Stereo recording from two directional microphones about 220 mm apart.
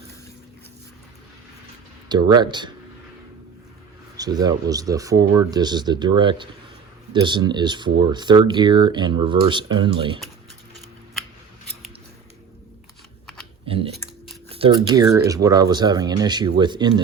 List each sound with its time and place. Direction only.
2.0 s speech: 20° right (ahead or behind)
4.2 s speech: 15° right (ahead or behind)
13.7 s a sound: 25° right (ahead or behind)
14.5 s speech: 20° right (ahead or behind)